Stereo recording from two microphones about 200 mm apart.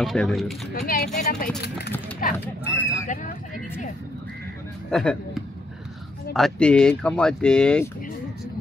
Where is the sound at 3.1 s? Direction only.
40° left (ahead or behind).